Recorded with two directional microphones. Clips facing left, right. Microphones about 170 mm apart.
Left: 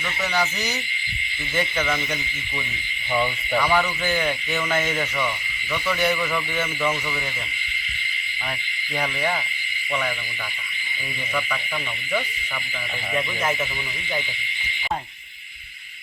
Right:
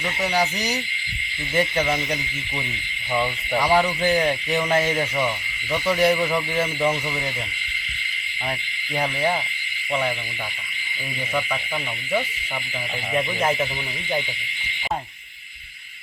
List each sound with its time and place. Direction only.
3.7 s speech: 35° right (ahead or behind)
6.0 s speech: 35° right (ahead or behind)
13.1 s speech: 30° right (ahead or behind)